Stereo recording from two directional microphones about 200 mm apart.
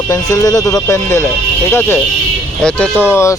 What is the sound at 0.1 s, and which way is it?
Speech, 15° left (ahead or behind).